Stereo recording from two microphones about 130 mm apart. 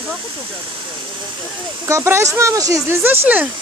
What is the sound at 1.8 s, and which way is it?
Speech, 20° right (ahead or behind).